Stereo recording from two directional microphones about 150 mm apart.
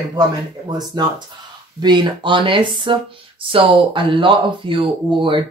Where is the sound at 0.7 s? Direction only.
30° right (ahead or behind).